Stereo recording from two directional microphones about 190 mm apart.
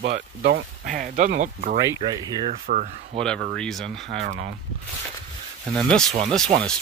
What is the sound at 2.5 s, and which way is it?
Speech, 40° right (ahead or behind).